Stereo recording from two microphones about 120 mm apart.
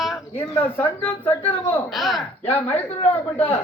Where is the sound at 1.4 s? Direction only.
60° left (ahead or behind).